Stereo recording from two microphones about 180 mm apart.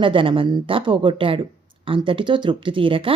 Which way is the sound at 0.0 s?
30° right (ahead or behind).